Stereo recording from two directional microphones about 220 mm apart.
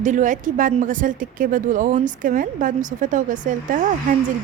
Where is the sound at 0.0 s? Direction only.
35° right (ahead or behind).